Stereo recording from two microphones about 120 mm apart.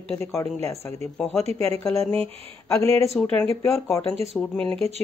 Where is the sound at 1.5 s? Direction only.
55° right (ahead or behind).